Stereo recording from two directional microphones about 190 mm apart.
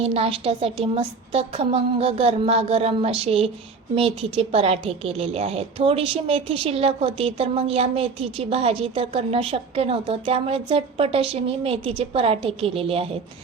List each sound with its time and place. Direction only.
0.0 s a woman's voice: 30° right (ahead or behind)